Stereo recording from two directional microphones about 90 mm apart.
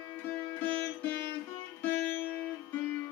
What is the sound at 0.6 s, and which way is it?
Music, 20° left (ahead or behind).